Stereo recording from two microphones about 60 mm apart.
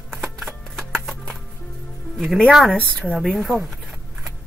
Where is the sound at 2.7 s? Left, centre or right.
Centre.